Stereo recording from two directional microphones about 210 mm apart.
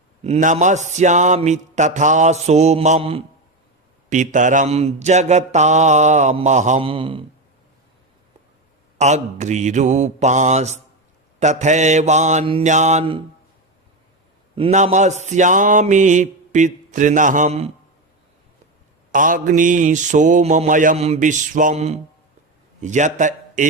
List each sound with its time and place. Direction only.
0.2 s mantra: 35° right (ahead or behind)
9.0 s mantra: 35° right (ahead or behind)
14.5 s mantra: 30° right (ahead or behind)
19.1 s mantra: 40° right (ahead or behind)
22.8 s a man's voice: 35° right (ahead or behind)